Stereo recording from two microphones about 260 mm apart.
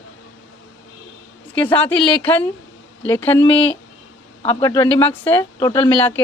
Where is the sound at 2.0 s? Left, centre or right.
Centre.